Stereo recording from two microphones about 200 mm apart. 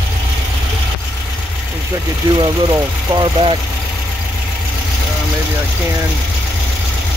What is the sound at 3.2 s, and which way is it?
Speech, 25° right (ahead or behind).